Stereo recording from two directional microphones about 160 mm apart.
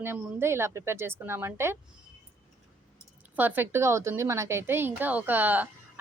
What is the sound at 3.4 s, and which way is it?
A woman's voice, 10° right (ahead or behind).